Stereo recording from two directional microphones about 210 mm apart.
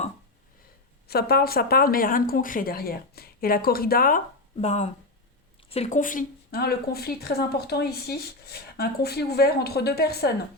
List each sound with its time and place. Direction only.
1.0 s speech: 45° left (ahead or behind)
4.5 s speech: 30° left (ahead or behind); by 10.3 s 50° left (ahead or behind)